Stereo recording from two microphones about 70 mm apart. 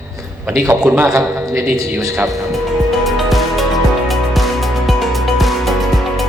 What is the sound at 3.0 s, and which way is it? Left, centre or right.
Music, centre.